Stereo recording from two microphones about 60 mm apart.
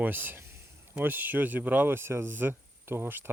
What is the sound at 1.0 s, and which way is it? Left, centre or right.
Speech, right.